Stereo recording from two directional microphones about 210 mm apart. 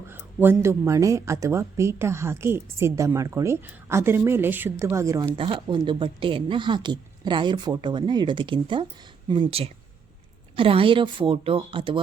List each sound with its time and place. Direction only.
0.1 s speech: 10° right (ahead or behind)